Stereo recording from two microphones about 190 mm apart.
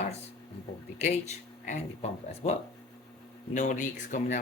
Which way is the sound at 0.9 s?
35° left (ahead or behind).